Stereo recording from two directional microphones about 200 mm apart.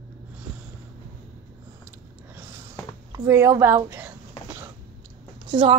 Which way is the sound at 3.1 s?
15° right (ahead or behind).